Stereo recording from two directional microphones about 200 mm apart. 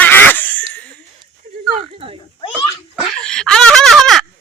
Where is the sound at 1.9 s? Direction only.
25° right (ahead or behind).